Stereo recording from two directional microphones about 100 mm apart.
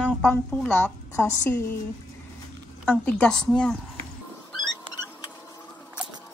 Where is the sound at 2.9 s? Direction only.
10° left (ahead or behind).